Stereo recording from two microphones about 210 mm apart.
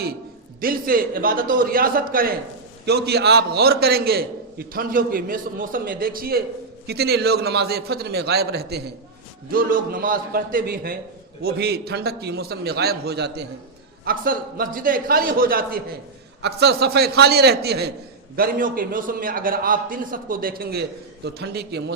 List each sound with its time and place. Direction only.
0.6 s a man's voice: 45° right (ahead or behind)